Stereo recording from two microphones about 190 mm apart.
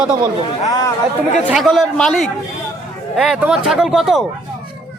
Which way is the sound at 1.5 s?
Centre (ahead or behind).